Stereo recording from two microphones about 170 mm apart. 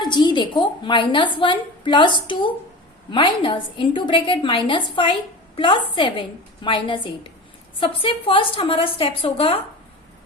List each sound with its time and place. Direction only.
0.0 s a woman's voice: 25° left (ahead or behind)